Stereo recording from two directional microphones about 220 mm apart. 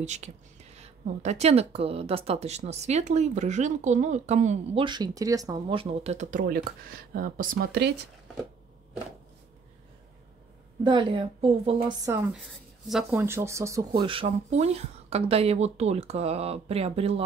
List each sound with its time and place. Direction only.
0.0 s speech: 30° right (ahead or behind)
4.8 s speech: 20° right (ahead or behind); by 7.9 s 45° right (ahead or behind)
10.8 s speech: 20° right (ahead or behind)
12.1 s speech: 10° right (ahead or behind)